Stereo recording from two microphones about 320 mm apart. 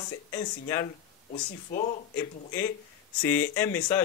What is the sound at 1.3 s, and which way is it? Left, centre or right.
Speech, left.